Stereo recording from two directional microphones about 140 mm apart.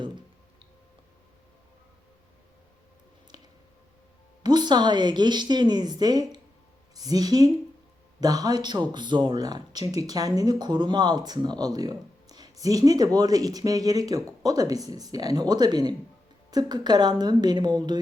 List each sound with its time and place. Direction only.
4.4 s a woman's voice: 30° right (ahead or behind)